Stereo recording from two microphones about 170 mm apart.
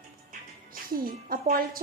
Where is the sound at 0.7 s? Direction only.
55° right (ahead or behind).